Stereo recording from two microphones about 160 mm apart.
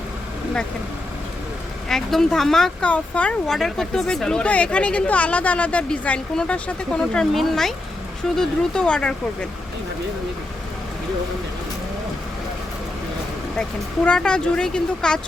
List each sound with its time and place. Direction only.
1.9 s speech: centre (ahead or behind)
13.6 s speech: 5° left (ahead or behind)